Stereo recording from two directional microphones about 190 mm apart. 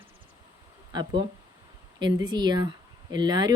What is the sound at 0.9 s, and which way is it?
Speech, 25° right (ahead or behind).